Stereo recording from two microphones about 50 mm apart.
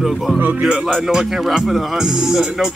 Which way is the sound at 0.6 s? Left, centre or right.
Centre.